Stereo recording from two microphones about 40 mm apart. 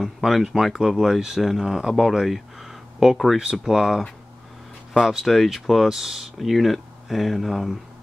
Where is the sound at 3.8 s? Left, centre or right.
Centre.